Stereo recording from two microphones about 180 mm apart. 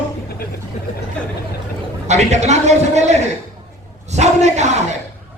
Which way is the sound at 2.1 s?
40° right (ahead or behind).